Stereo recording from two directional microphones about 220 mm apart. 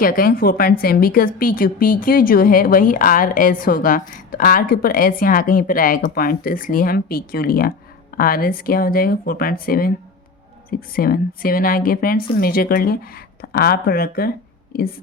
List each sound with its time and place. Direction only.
0.0 s a woman's voice: 40° left (ahead or behind)